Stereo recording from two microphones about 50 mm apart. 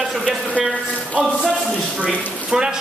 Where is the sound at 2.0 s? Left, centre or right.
Centre.